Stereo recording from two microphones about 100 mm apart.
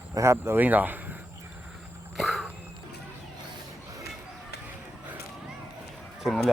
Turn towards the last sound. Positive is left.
turn(degrees=0)  # may be behind; listen again after turning